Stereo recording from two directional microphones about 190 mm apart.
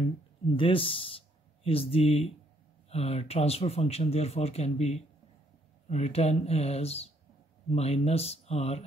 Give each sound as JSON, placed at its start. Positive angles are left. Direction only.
{"t": 0.6, "sound": "speech", "side_deg": 30}